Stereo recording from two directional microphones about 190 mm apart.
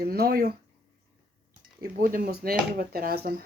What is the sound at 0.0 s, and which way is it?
Speech, 55° right (ahead or behind).